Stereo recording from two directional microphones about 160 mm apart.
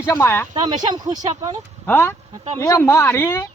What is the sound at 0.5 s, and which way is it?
Speech, 25° right (ahead or behind).